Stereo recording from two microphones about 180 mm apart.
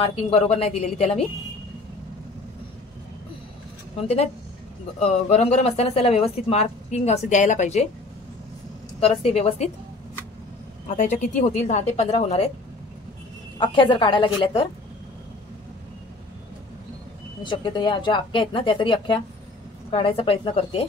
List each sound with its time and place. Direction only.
0.0 s speech: 35° left (ahead or behind)
5.0 s speech: 35° left (ahead or behind)
9.0 s speech: 35° left (ahead or behind)
11.0 s speech: 45° left (ahead or behind)
13.6 s speech: 25° left (ahead or behind)
17.4 s speech: 25° left (ahead or behind)